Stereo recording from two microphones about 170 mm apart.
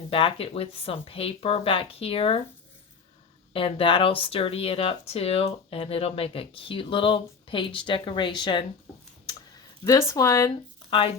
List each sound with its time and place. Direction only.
0.1 s speech: 30° left (ahead or behind)
3.5 s speech: 30° left (ahead or behind)
9.8 s speech: 20° left (ahead or behind)
10.8 s speech: 30° left (ahead or behind)